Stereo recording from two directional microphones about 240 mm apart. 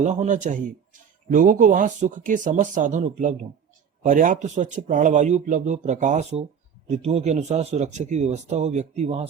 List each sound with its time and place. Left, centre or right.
0.0 s a man's voice: right